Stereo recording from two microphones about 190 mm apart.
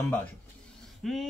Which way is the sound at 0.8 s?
Centre (ahead or behind).